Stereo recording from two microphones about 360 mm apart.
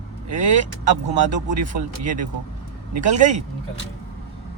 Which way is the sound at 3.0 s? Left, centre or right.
Centre.